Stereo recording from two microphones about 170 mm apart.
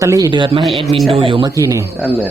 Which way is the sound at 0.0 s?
20° right (ahead or behind).